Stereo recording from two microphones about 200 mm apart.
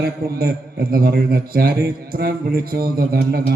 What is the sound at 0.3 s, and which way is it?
A man's voice, 50° right (ahead or behind).